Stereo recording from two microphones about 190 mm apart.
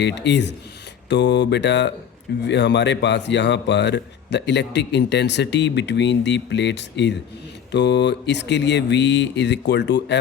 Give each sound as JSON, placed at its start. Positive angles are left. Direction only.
{"t": 0.0, "sound": "speech", "side_deg": 65}